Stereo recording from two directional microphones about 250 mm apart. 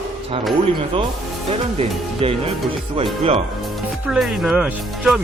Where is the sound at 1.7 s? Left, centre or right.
Right.